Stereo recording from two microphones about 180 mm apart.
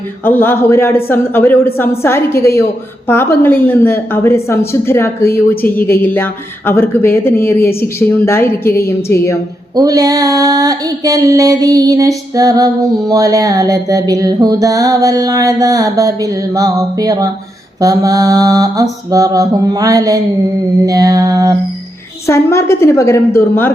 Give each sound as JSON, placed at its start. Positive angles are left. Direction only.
{"t": 0.3, "sound": "a woman's voice", "side_deg": 10}
{"t": 9.7, "sound": "female singing", "side_deg": -20}
{"t": 22.3, "sound": "a woman's voice", "side_deg": 15}